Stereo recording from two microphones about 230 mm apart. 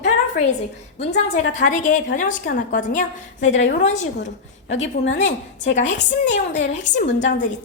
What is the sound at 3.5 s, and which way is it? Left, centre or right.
Speech, left.